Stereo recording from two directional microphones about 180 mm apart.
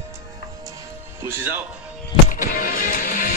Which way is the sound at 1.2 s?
15° right (ahead or behind).